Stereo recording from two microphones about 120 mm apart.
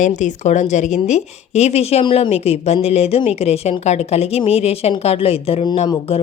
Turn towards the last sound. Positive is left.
turn(degrees=55)  # may be behind; listen again after turning